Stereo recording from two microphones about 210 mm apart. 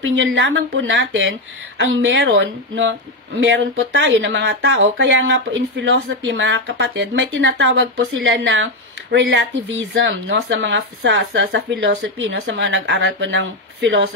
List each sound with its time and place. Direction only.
0.0 s speech: 60° right (ahead or behind)